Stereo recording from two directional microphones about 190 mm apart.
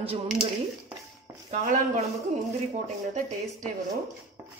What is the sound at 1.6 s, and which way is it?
A man's voice, 45° right (ahead or behind).